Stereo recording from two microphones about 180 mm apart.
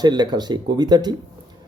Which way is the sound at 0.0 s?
25° right (ahead or behind).